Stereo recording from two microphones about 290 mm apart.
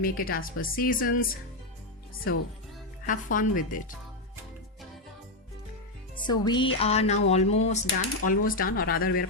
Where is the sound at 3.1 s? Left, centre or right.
Left.